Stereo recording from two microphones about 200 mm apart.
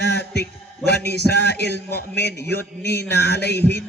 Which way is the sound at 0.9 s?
55° left (ahead or behind).